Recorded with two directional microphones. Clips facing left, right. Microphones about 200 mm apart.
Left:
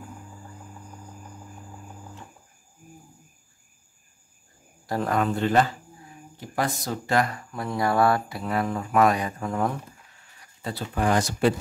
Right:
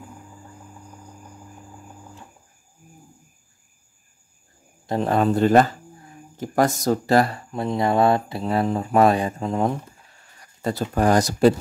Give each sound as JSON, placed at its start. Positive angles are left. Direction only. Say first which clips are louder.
{"t": 4.8, "sound": "speech", "louder": "right 4 dB", "side_deg": -25}
{"t": 10.6, "sound": "speech", "louder": "right 6 dB", "side_deg": -45}